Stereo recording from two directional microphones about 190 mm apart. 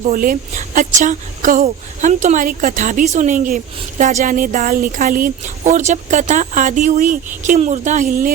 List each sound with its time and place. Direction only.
0.0 s speech: 45° right (ahead or behind)